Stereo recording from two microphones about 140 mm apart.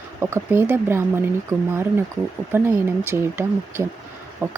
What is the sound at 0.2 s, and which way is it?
Speech, 15° right (ahead or behind).